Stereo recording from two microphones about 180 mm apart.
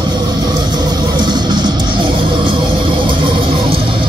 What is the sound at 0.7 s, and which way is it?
Music, 25° right (ahead or behind).